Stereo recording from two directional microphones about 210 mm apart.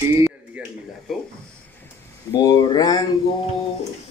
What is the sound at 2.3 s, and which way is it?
Speech, 20° left (ahead or behind).